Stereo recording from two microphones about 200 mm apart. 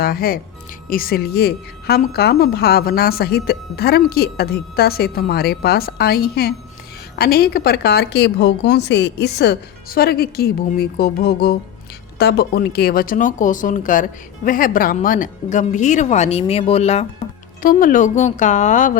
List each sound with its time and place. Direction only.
0.0 s a woman's voice: 50° left (ahead or behind); by 17.1 s 30° left (ahead or behind)
17.6 s speech: 45° left (ahead or behind)